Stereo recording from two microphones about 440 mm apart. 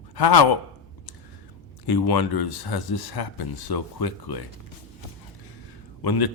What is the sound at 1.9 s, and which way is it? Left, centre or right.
Speech, left.